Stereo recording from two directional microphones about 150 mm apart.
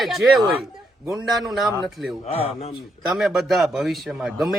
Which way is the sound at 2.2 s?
40° left (ahead or behind).